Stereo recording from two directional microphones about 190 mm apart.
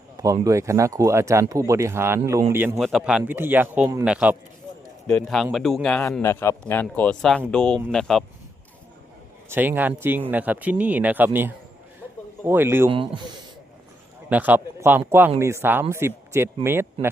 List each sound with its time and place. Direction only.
0.2 s speech: 20° right (ahead or behind)
2.7 s speech: centre (ahead or behind)
6.2 s speech: 15° left (ahead or behind)
9.5 s speech: 10° right (ahead or behind)
14.3 s speech: 10° right (ahead or behind)